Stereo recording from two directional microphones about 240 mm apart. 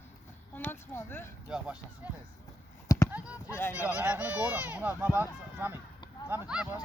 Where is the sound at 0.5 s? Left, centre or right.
Centre.